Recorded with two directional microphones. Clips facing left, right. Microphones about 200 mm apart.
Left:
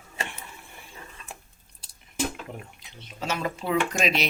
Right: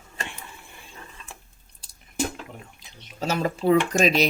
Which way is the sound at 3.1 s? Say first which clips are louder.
Right 4 dB; 35° right (ahead or behind).